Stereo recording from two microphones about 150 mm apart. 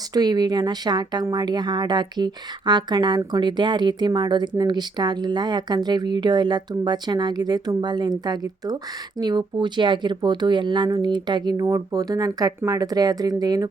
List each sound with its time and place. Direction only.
0.1 s speech: 25° right (ahead or behind)